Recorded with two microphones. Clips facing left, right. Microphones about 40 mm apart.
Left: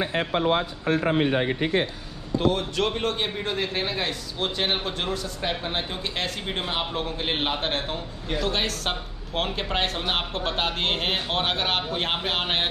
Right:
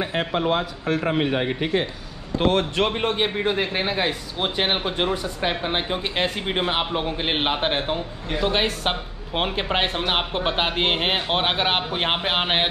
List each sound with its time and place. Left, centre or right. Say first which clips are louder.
0.8 s a man's voice: even; right
2.3 s speech: right 3 dB; right
2.7 s a man's voice: right 3 dB; right